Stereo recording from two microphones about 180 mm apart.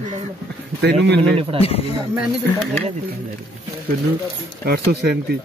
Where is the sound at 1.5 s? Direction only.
30° right (ahead or behind).